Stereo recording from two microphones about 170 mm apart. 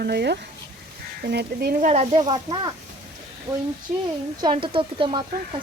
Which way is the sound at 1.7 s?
45° right (ahead or behind).